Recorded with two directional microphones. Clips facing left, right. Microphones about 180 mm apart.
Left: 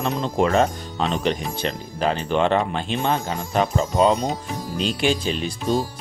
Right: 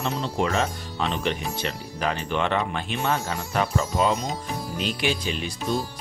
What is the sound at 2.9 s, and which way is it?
Speech, 20° left (ahead or behind).